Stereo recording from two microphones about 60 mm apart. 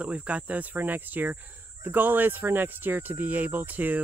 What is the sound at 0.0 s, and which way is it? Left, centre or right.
Speech, right.